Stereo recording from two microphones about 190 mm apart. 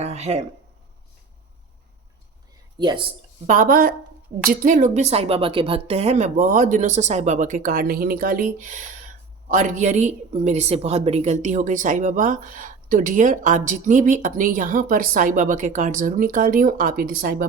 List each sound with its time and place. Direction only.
0.0 s a sound: 35° right (ahead or behind)
2.7 s speech: 20° right (ahead or behind)
3.4 s speech: 45° right (ahead or behind)